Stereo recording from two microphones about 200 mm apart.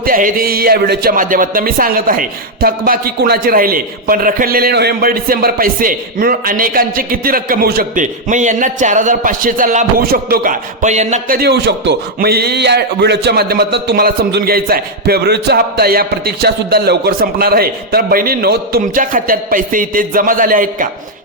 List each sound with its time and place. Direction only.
0.0 s speech: 45° right (ahead or behind)
11.3 s speech: 55° right (ahead or behind)